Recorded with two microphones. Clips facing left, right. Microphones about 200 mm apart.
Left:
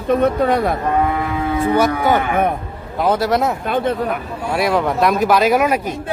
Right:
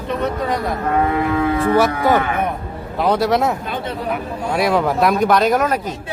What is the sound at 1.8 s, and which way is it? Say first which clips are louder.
A man's voice: left 1 dB; centre (ahead or behind).